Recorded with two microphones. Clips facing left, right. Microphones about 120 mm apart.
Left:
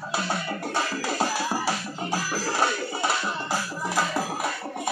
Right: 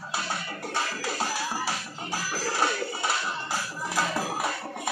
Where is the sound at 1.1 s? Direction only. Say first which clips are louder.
Left 5 dB; 15° left (ahead or behind).